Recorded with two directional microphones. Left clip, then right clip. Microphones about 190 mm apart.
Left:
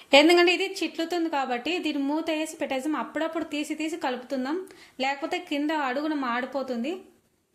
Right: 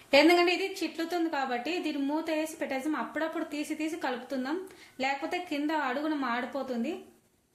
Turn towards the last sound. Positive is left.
turn(degrees=25)  # may be behind; listen again after turning